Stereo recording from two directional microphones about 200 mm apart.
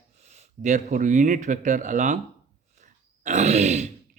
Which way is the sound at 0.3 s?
35° right (ahead or behind).